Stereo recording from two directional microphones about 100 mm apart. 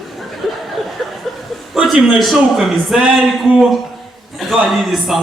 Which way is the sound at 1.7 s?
5° right (ahead or behind).